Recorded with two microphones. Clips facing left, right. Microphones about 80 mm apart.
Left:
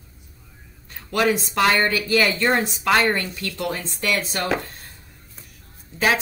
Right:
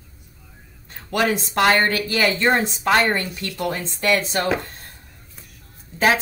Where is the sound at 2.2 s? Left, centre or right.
Right.